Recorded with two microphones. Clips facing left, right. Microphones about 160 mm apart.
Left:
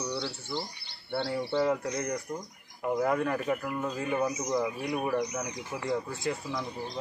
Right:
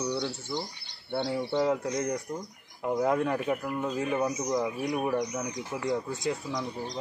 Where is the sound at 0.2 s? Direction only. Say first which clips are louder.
Right 2 dB; 20° right (ahead or behind).